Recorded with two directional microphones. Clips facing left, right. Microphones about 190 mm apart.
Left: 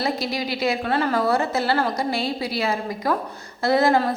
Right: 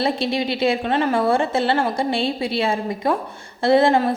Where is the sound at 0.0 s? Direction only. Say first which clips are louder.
Right 4 dB; 25° right (ahead or behind).